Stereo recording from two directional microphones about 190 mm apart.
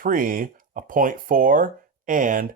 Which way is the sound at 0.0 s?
45° right (ahead or behind).